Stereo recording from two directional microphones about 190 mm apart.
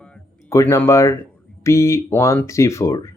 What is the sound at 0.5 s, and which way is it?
Speech, 15° left (ahead or behind).